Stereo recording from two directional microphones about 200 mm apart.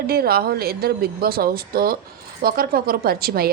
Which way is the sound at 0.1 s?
50° right (ahead or behind).